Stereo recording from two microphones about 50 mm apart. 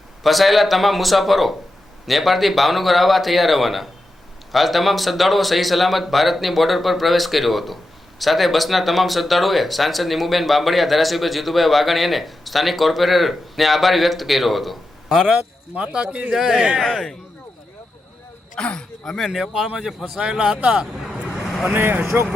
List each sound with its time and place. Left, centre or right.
0.2 s speech: centre
15.3 s speech: right
16.3 s speech: centre
16.8 s speech: centre
18.5 s speech: centre
19.0 s speech: centre
20.1 s speech: centre
21.4 s vehicle: centre
21.8 s speech: right